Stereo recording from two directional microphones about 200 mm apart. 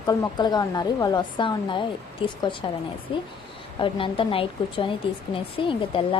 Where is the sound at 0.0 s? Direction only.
20° left (ahead or behind).